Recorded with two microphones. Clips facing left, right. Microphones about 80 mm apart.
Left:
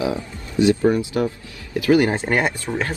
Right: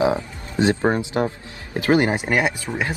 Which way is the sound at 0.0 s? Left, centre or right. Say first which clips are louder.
Right 4 dB; right.